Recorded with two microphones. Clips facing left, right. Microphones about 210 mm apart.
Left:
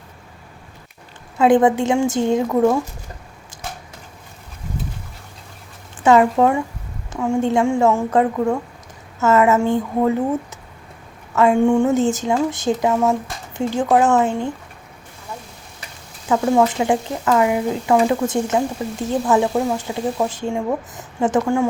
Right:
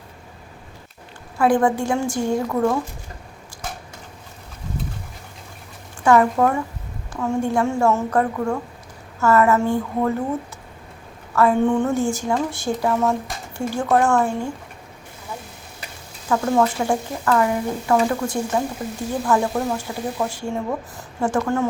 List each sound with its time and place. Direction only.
1.4 s a woman's voice: 20° left (ahead or behind)
6.0 s a woman's voice: 20° left (ahead or behind)
11.3 s a woman's voice: 15° left (ahead or behind)
16.3 s a woman's voice: 15° left (ahead or behind)